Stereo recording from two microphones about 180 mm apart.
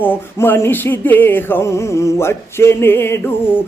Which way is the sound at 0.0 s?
10° left (ahead or behind).